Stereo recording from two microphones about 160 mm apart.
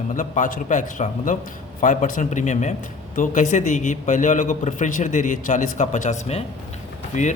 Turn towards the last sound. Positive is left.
turn(degrees=50)  # may be behind; listen again after turning